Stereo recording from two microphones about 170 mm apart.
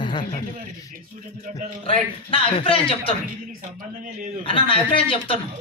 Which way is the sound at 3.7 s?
50° right (ahead or behind).